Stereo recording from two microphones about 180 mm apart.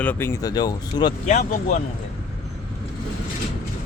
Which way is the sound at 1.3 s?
40° left (ahead or behind).